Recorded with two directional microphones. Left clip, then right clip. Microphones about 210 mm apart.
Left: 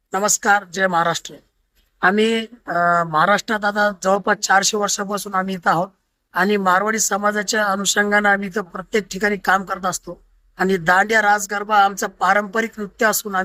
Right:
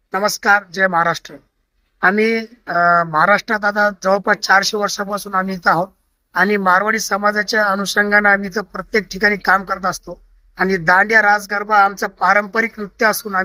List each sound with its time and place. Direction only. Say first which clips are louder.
0.1 s speech: right 2 dB; 5° left (ahead or behind)
4.9 s speech: right 1 dB; 25° left (ahead or behind)
5.6 s speech: right 3 dB; 5° left (ahead or behind)